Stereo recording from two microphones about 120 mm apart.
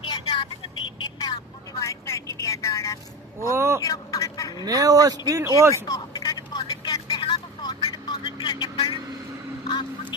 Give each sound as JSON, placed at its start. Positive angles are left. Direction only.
{"t": 0.0, "sound": "vehicle", "side_deg": 45}
{"t": 1.8, "sound": "vehicle", "side_deg": 25}
{"t": 3.5, "sound": "speech", "side_deg": -25}
{"t": 3.8, "sound": "a sound", "side_deg": 30}
{"t": 4.6, "sound": "speech", "side_deg": -30}
{"t": 5.7, "sound": "telephone", "side_deg": 30}
{"t": 6.7, "sound": "vehicle", "side_deg": 35}
{"t": 9.6, "sound": "a sound", "side_deg": 40}